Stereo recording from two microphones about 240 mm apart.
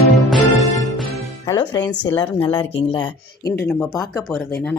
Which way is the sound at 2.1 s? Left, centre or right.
Centre.